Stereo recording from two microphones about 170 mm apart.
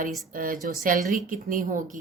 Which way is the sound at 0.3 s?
55° right (ahead or behind).